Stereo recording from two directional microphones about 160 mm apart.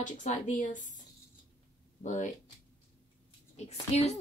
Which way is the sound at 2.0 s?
50° left (ahead or behind).